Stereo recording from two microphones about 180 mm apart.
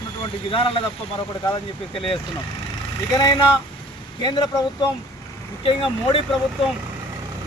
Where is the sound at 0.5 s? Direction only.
30° left (ahead or behind).